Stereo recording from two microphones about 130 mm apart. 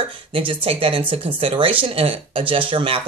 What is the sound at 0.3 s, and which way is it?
Speech, 40° right (ahead or behind).